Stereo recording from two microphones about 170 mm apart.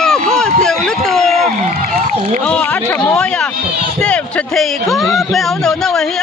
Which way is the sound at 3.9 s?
5° left (ahead or behind).